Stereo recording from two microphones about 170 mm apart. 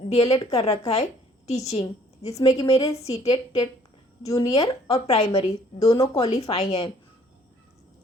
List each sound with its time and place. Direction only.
0.1 s a woman's voice: 40° left (ahead or behind)
4.4 s speech: 20° left (ahead or behind)
4.9 s a woman's voice: 40° left (ahead or behind)
5.8 s speech: 20° left (ahead or behind)
6.1 s a woman's voice: 40° left (ahead or behind)